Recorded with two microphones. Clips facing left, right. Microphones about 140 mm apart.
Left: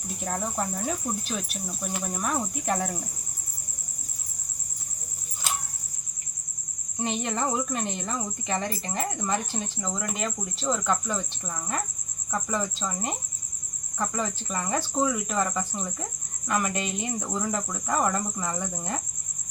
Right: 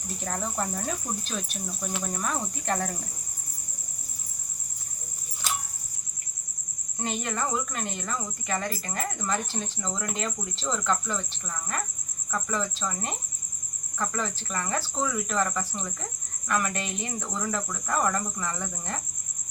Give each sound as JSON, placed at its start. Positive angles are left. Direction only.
{"t": 0.3, "sound": "speech", "side_deg": 5}
{"t": 7.0, "sound": "speech", "side_deg": 20}